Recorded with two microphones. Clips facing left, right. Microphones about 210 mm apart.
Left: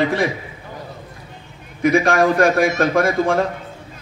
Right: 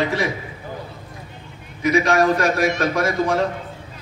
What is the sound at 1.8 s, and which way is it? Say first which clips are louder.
A man's voice: left 2 dB; 55° left (ahead or behind).